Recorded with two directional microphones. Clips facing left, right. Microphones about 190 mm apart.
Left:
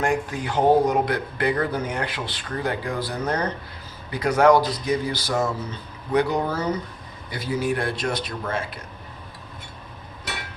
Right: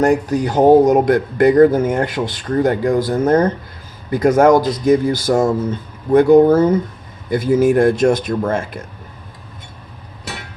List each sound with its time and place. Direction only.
0.0 s speech: 40° right (ahead or behind)